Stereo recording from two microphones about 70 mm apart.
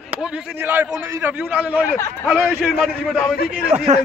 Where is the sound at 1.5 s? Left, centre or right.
Centre.